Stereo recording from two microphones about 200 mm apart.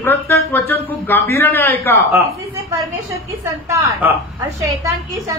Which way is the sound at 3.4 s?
15° right (ahead or behind).